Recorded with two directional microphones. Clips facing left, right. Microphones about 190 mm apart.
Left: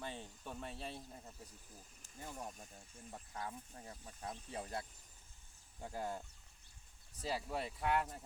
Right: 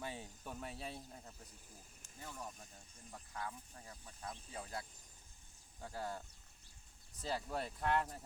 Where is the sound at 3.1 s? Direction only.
30° left (ahead or behind).